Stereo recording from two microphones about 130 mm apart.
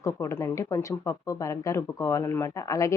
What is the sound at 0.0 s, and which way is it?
A woman's voice, 20° left (ahead or behind).